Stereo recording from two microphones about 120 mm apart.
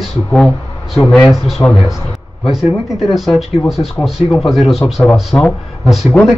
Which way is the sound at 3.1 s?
Centre (ahead or behind).